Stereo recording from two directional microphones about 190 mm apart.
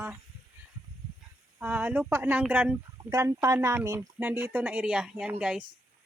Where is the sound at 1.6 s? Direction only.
10° right (ahead or behind).